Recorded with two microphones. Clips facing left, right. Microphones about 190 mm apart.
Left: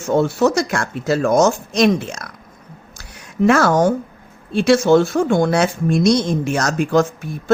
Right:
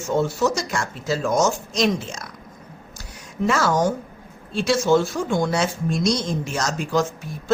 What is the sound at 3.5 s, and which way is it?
Speech, 60° left (ahead or behind).